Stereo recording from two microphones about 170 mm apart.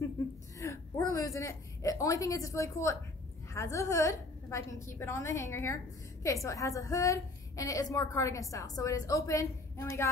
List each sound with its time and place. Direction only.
0.6 s a woman's voice: 15° left (ahead or behind)